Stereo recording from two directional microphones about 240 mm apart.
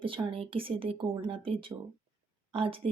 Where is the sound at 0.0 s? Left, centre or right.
Right.